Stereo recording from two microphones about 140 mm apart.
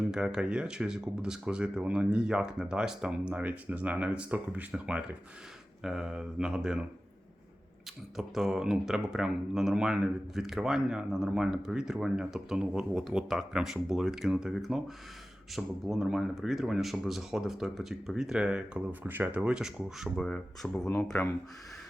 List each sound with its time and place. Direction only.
0.1 s speech: 5° right (ahead or behind)
8.1 s speech: centre (ahead or behind)
20.8 s speech: 20° left (ahead or behind)